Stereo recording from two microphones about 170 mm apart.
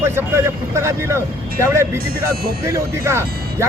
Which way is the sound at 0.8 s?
15° right (ahead or behind).